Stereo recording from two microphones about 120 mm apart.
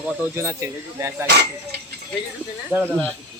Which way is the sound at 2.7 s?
20° right (ahead or behind).